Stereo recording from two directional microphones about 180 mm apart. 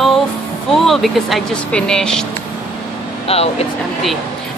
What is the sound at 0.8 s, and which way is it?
Speech, centre (ahead or behind).